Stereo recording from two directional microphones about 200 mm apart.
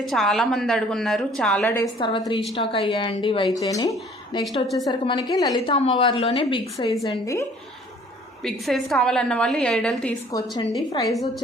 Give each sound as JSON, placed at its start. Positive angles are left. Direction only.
{"t": 0.0, "sound": "a woman's voice", "side_deg": 0}
{"t": 1.8, "sound": "a woman's voice", "side_deg": 20}
{"t": 8.4, "sound": "a woman's voice", "side_deg": 0}
{"t": 10.3, "sound": "a woman's voice", "side_deg": 20}
{"t": 11.1, "sound": "a woman's voice", "side_deg": 0}